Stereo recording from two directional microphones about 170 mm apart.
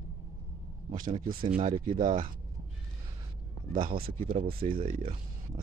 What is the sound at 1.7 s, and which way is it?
Speech, 55° right (ahead or behind).